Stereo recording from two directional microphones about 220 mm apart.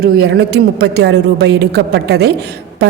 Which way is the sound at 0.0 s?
45° right (ahead or behind).